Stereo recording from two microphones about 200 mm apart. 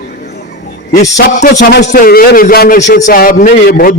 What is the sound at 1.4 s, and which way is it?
A man's voice, 35° left (ahead or behind).